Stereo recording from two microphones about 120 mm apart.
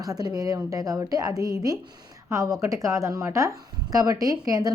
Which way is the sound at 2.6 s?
25° right (ahead or behind).